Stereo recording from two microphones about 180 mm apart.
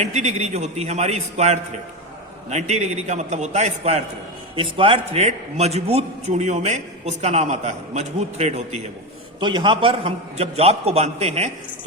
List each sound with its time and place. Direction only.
0.0 s a man's voice: 40° right (ahead or behind)
9.4 s a man's voice: 25° right (ahead or behind)